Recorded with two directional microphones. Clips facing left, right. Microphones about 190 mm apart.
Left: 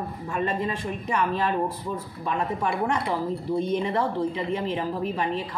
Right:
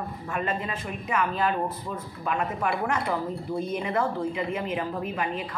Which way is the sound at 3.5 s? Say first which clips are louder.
Left 5 dB; 5° right (ahead or behind).